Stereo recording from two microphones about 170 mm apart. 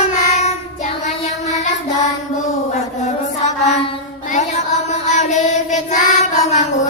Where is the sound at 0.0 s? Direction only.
40° left (ahead or behind).